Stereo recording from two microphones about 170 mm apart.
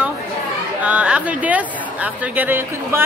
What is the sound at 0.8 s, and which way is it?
Speech, 10° right (ahead or behind).